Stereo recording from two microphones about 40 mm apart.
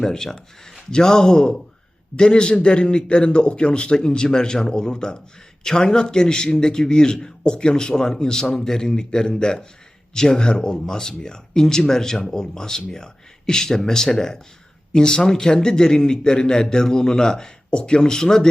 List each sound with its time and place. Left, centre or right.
0.0 s a man's voice: centre
17.7 s a man's voice: left